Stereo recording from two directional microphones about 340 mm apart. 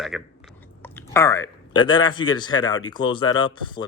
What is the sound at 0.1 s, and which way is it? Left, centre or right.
Speech, centre.